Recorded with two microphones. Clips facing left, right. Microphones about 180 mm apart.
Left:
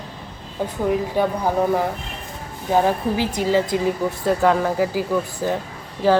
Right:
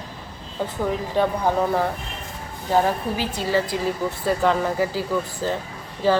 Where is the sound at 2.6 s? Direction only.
15° left (ahead or behind).